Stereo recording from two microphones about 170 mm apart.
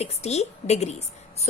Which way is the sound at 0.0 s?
40° left (ahead or behind).